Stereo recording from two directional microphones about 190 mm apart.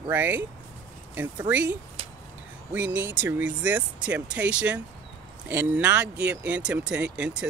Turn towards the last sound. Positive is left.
turn(degrees=-5)  # may be behind; listen again after turning